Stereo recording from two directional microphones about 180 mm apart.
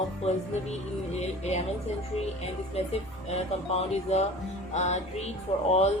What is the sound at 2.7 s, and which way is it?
Speech, 35° left (ahead or behind).